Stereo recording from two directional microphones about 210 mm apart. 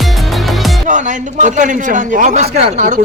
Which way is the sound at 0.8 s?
35° right (ahead or behind).